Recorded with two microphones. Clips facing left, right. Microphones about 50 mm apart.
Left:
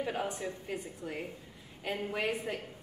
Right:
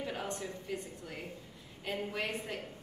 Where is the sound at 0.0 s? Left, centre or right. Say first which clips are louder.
Left 4 dB; centre.